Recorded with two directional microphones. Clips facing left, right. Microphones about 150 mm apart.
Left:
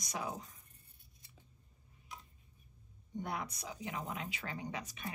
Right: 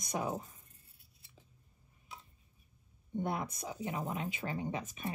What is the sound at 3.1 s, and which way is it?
Speech, 50° right (ahead or behind).